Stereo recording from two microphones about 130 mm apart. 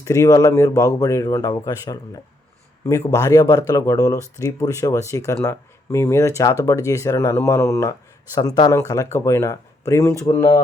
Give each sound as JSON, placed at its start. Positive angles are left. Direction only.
{"t": 0.0, "sound": "speech", "side_deg": 25}
{"t": 8.4, "sound": "speech", "side_deg": 30}